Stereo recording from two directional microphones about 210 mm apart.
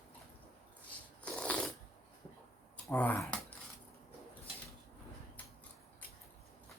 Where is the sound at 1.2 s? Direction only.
5° left (ahead or behind).